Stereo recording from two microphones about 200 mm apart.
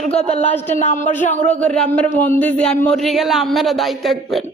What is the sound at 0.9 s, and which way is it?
Speech, 40° left (ahead or behind).